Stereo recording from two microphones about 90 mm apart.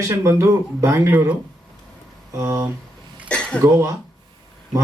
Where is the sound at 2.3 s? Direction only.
30° right (ahead or behind).